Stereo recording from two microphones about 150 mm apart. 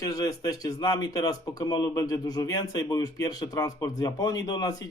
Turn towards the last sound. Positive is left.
turn(degrees=25)  # may be behind; listen again after turning